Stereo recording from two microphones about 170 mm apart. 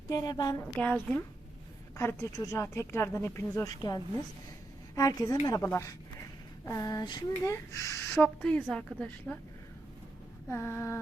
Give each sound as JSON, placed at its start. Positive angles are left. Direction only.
{"t": 0.1, "sound": "speech", "side_deg": 25}
{"t": 0.6, "sound": "speech", "side_deg": 10}
{"t": 2.0, "sound": "speech", "side_deg": 15}
{"t": 10.5, "sound": "speech", "side_deg": 10}